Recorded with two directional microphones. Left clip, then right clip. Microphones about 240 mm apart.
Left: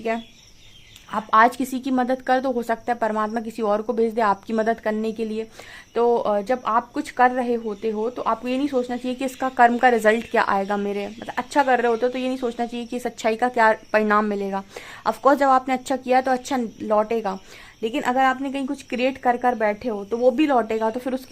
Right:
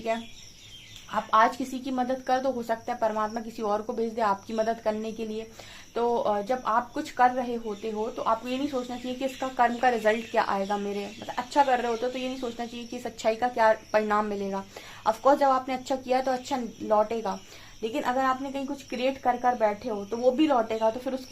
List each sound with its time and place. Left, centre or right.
1.1 s speech: left